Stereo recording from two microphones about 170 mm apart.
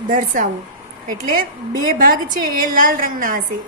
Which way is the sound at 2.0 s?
55° right (ahead or behind).